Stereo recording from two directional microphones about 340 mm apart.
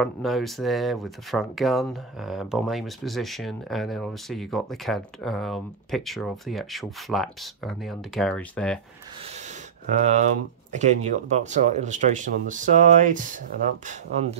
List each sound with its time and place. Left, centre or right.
0.0 s speech: centre
9.9 s speech: right